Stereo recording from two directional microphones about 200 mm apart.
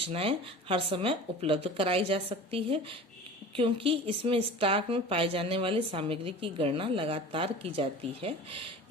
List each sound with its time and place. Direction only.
0.0 s speech: 30° right (ahead or behind)